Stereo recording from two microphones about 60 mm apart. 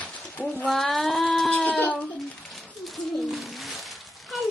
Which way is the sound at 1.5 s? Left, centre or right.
Left.